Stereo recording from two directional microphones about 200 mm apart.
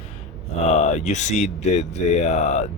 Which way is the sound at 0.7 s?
35° left (ahead or behind).